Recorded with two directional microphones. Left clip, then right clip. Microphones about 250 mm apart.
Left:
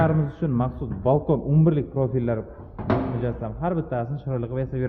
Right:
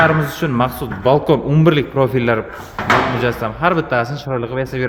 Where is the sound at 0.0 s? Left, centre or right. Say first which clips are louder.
Right 10 dB; centre.